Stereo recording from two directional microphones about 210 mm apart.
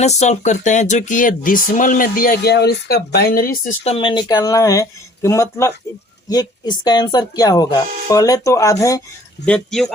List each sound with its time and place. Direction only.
0.0 s speech: 30° left (ahead or behind)
3.8 s speech: 25° left (ahead or behind)
9.5 s speech: 5° left (ahead or behind)